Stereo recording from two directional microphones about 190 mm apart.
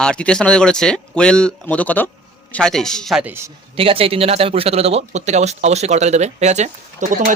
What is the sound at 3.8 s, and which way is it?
Speech, 30° right (ahead or behind).